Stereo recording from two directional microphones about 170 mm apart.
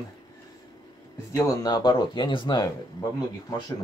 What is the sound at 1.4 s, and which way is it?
Speech, 20° left (ahead or behind).